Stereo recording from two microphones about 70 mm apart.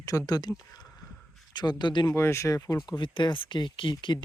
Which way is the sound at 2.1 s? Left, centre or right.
Left.